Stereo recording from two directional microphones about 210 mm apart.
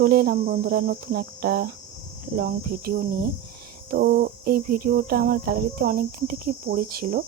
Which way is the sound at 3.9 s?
45° right (ahead or behind).